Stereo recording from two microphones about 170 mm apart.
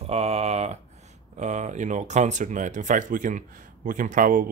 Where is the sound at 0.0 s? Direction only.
35° right (ahead or behind).